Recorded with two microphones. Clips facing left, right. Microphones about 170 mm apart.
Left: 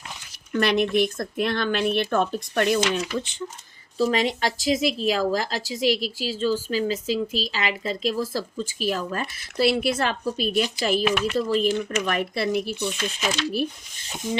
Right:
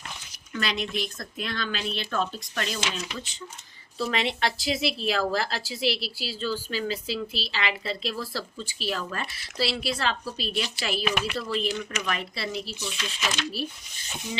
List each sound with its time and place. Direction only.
0.5 s speech: 60° left (ahead or behind)
3.9 s speech: 40° left (ahead or behind)